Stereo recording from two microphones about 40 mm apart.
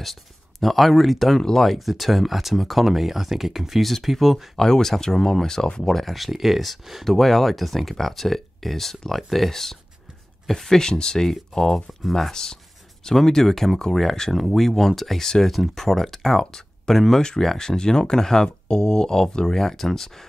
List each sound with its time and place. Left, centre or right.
0.0 s speech: centre
5.9 s speech: centre